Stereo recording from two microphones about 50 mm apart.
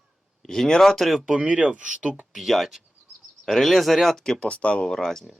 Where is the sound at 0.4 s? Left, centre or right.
Centre.